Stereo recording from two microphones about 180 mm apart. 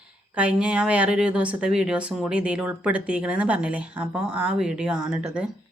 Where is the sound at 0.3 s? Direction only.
5° right (ahead or behind).